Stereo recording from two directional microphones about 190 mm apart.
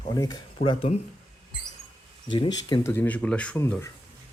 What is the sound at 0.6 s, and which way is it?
Speech, 50° left (ahead or behind).